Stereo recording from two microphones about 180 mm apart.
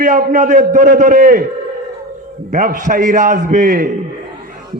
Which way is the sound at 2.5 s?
45° right (ahead or behind).